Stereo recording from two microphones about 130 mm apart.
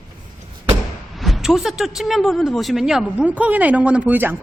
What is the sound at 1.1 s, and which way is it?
Speech, centre (ahead or behind).